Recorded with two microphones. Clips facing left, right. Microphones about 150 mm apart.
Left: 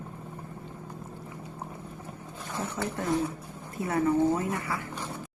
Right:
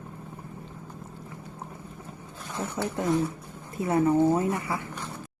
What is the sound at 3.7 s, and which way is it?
A woman's voice, 20° right (ahead or behind).